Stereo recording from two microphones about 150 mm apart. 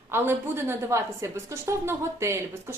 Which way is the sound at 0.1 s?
15° right (ahead or behind).